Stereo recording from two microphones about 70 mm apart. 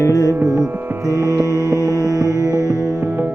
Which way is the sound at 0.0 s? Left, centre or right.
Left.